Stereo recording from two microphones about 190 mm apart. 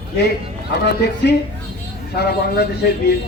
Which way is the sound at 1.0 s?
60° left (ahead or behind).